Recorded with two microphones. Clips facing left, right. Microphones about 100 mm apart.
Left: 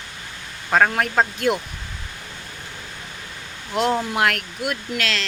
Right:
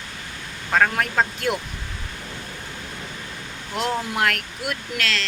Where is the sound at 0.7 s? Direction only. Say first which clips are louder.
Left 2 dB; 25° left (ahead or behind).